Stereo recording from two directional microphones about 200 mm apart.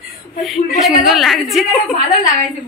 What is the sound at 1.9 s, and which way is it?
Speech, 40° left (ahead or behind).